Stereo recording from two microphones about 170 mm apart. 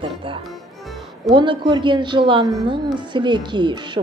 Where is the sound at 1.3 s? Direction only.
30° right (ahead or behind).